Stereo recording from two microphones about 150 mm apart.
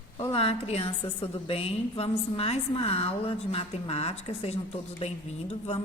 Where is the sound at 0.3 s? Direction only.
40° left (ahead or behind).